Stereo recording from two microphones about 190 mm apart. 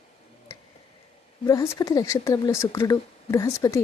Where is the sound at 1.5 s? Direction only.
20° left (ahead or behind).